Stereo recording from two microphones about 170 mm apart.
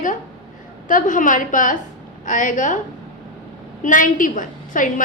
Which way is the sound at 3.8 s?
50° left (ahead or behind).